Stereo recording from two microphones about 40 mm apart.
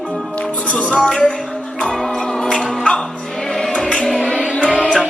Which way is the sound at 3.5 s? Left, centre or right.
Centre.